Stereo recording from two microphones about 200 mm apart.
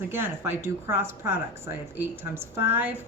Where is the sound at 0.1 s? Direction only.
10° right (ahead or behind).